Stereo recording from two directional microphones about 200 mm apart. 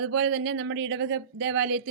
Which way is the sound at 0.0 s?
90° right.